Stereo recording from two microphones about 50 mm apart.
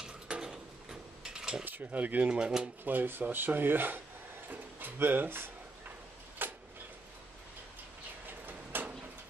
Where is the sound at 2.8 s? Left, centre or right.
Right.